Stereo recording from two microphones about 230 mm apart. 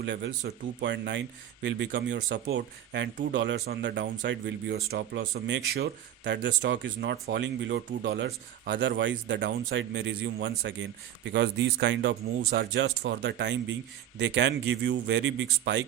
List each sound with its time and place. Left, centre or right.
0.0 s speech: right